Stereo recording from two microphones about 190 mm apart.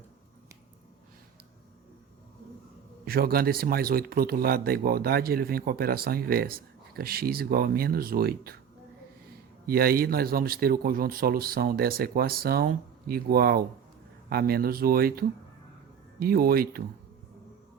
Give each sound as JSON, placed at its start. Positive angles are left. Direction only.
{"t": 3.1, "sound": "speech", "side_deg": -50}
{"t": 9.6, "sound": "speech", "side_deg": -55}
{"t": 16.2, "sound": "speech", "side_deg": -50}